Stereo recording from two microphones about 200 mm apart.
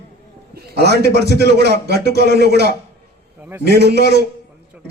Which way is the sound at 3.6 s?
55° right (ahead or behind).